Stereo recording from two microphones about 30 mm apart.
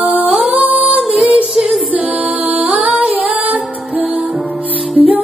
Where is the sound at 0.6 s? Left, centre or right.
Right.